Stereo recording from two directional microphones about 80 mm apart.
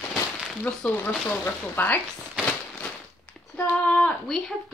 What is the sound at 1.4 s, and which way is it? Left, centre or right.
Speech, left.